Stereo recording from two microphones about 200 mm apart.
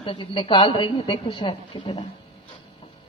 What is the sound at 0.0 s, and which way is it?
A woman's voice, 25° left (ahead or behind).